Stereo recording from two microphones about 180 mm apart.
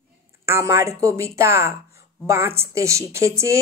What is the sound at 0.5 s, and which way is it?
A woman's voice, 15° right (ahead or behind).